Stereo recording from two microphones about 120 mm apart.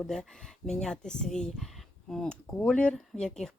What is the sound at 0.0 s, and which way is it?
Speech, 5° left (ahead or behind).